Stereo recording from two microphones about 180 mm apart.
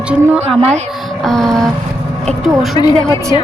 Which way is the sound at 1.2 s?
Centre (ahead or behind).